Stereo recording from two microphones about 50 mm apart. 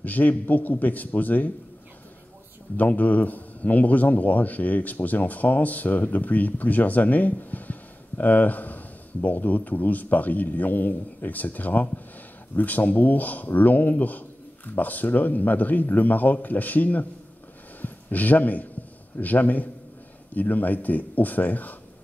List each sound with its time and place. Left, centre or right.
0.0 s a man's voice: left
2.8 s a man's voice: left